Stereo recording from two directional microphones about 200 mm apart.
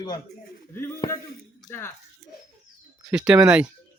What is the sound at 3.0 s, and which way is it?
Speech, 5° right (ahead or behind).